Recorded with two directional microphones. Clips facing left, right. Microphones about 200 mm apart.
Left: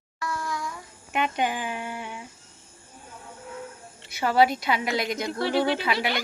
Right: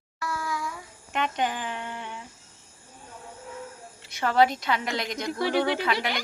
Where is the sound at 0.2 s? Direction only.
5° right (ahead or behind).